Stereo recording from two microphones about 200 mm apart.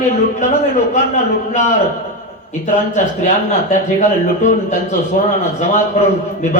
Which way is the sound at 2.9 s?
35° left (ahead or behind).